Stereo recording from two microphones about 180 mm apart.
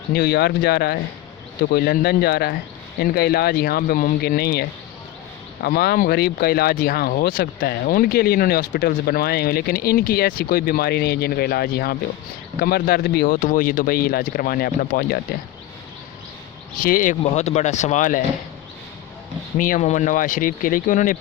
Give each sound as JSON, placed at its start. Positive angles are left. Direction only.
{"t": 0.1, "sound": "speech", "side_deg": 60}
{"t": 5.6, "sound": "speech", "side_deg": 60}
{"t": 16.8, "sound": "speech", "side_deg": 45}
{"t": 19.5, "sound": "speech", "side_deg": 45}